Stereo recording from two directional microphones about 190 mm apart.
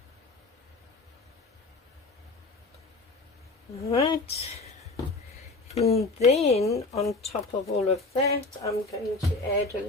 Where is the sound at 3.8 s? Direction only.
30° left (ahead or behind).